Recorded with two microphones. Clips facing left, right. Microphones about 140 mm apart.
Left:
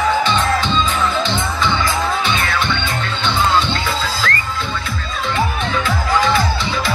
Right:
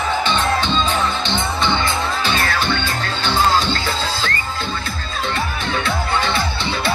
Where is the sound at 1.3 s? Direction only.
30° right (ahead or behind).